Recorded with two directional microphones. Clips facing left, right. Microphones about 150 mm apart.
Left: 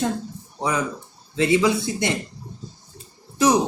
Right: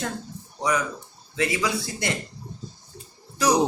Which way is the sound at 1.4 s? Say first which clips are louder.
Left 7 dB; 25° left (ahead or behind).